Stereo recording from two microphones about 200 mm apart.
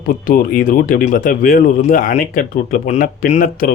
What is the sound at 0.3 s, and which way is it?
Speech, 45° left (ahead or behind).